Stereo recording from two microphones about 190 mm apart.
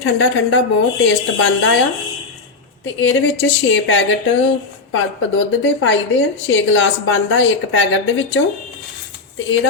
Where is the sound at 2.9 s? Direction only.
90° left.